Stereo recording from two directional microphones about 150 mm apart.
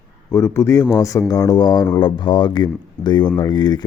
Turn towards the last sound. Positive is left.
turn(degrees=30)  # may be behind; listen again after turning